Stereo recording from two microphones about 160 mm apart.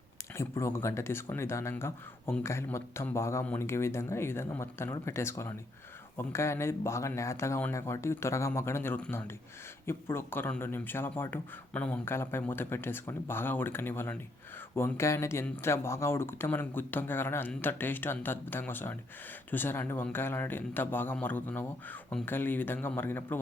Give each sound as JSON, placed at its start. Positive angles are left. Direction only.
{"t": 0.3, "sound": "speech", "side_deg": 15}